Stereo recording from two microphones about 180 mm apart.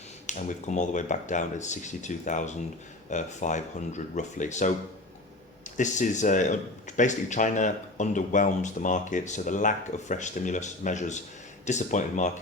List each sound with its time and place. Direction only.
0.3 s speech: 45° left (ahead or behind)
5.7 s speech: 45° left (ahead or behind)